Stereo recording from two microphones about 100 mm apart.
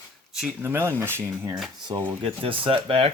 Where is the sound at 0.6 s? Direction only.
25° right (ahead or behind).